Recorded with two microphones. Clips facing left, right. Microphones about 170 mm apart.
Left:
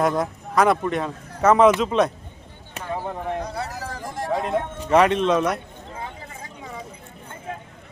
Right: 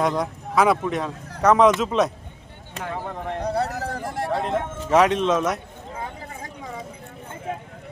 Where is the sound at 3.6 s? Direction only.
60° right (ahead or behind).